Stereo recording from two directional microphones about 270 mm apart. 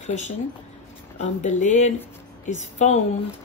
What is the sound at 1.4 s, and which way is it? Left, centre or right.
Speech, left.